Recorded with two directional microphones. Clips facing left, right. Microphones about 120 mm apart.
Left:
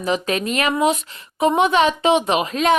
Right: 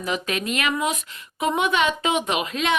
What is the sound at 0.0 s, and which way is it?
A woman's voice, 35° left (ahead or behind).